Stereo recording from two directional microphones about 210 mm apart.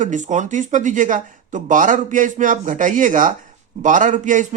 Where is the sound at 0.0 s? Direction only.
35° right (ahead or behind).